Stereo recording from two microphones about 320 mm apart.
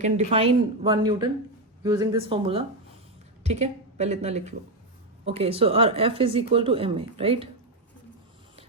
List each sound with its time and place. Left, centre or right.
0.0 s a woman's voice: centre